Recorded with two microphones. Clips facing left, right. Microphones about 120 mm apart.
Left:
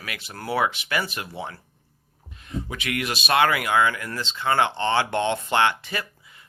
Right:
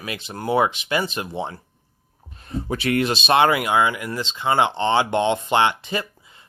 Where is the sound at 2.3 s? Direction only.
40° right (ahead or behind).